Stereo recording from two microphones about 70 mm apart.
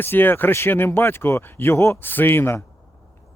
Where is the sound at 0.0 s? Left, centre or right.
Left.